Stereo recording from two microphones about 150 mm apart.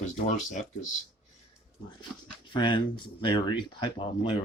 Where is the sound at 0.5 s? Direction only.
55° left (ahead or behind).